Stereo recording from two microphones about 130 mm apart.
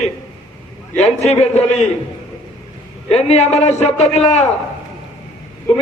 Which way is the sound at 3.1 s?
55° left (ahead or behind).